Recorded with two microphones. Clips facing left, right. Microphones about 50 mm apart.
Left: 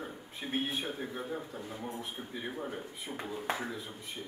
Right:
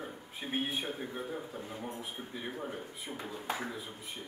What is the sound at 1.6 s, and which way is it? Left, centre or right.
Speech, centre.